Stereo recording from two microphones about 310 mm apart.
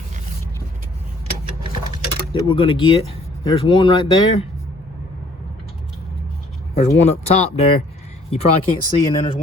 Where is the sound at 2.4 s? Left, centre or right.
Centre.